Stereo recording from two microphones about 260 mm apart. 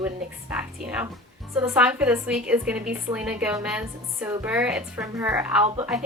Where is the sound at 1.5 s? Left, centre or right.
Centre.